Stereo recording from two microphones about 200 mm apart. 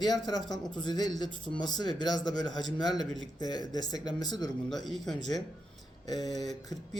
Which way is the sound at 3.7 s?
20° left (ahead or behind).